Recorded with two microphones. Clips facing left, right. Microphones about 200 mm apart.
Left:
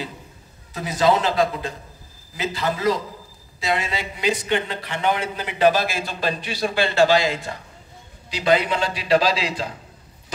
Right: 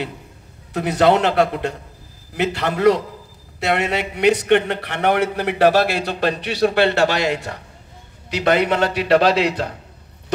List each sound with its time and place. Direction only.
0.7 s a man's voice: 65° right (ahead or behind)